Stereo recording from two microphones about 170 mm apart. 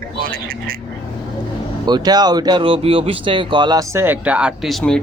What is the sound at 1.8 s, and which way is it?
Speech, 25° right (ahead or behind).